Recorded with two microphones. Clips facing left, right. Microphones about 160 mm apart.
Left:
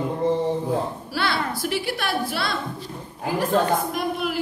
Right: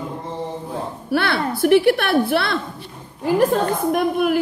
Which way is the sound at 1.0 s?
55° right (ahead or behind).